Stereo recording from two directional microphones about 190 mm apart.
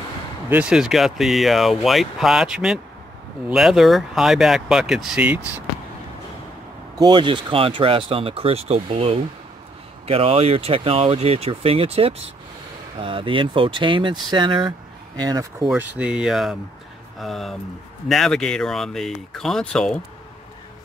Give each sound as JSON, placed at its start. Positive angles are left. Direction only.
{"t": 0.5, "sound": "speech", "side_deg": -5}
{"t": 7.0, "sound": "speech", "side_deg": -25}
{"t": 15.7, "sound": "speech", "side_deg": -5}